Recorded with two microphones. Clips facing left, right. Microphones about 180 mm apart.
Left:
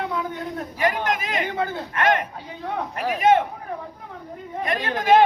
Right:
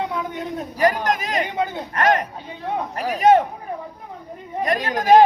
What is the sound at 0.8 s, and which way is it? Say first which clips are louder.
Speech: right 4 dB; 40° right (ahead or behind).